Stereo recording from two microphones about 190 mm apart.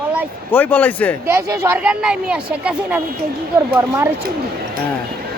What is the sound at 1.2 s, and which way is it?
Speech, 10° right (ahead or behind).